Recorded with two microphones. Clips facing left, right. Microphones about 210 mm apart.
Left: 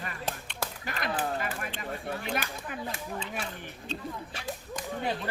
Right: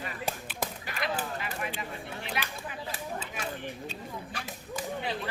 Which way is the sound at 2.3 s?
50° left (ahead or behind).